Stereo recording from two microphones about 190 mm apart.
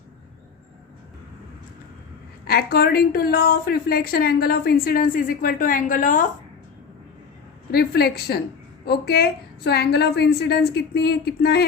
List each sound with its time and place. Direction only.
2.4 s a woman's voice: 55° left (ahead or behind)
7.7 s a woman's voice: 55° left (ahead or behind)